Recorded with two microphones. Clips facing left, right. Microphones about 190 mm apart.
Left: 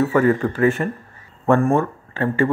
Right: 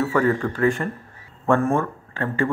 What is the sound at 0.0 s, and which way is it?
Speech, 20° left (ahead or behind).